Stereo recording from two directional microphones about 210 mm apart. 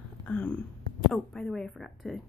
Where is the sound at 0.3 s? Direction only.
5° left (ahead or behind).